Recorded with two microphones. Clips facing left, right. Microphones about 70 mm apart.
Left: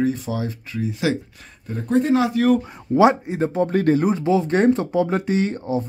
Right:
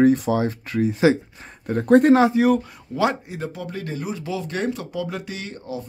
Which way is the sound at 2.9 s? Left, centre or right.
Left.